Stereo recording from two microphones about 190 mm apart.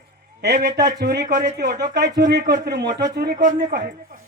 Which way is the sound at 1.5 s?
50° right (ahead or behind).